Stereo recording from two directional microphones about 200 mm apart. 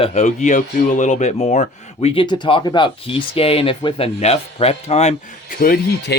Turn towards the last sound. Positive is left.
turn(degrees=50)  # may be behind; listen again after turning